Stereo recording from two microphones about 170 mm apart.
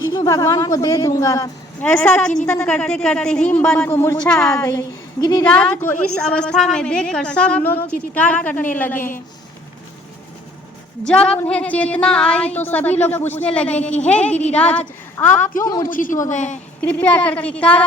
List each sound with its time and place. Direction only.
0.1 s a woman's voice: 20° left (ahead or behind)
2.0 s a woman's voice: 5° left (ahead or behind)
4.3 s a woman's voice: 5° left (ahead or behind)
4.5 s a woman's voice: 20° left (ahead or behind)
5.4 s a woman's voice: 5° left (ahead or behind)
11.0 s a woman's voice: 5° left (ahead or behind); by 15.9 s 20° left (ahead or behind)
15.9 s speech: 50° left (ahead or behind)
16.8 s a woman's voice: 10° left (ahead or behind)